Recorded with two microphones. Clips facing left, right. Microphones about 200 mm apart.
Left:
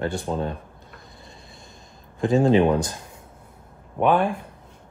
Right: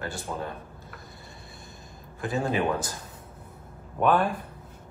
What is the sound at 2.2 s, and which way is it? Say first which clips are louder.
Speech: left 9 dB; 25° left (ahead or behind).